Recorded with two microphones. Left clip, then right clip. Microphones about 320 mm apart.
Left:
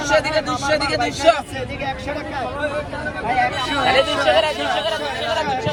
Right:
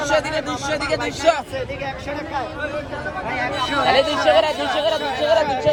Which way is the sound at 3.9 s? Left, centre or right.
Right.